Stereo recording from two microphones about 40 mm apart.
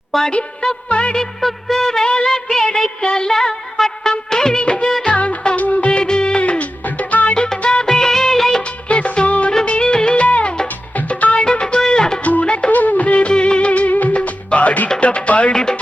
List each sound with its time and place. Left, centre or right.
0.3 s music: left
1.1 s music: centre
4.1 s music of bollywood: centre; by 5.4 s left
5.5 s music: left
6.0 s music: left
7.3 s music: left
7.9 s music of bollywood: centre
8.6 s music of bollywood: left
9.6 s music: left
10.2 s music: left
11.4 s music: left
12.2 s music: left